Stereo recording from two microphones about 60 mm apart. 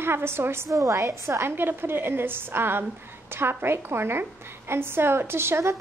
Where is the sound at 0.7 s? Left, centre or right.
Right.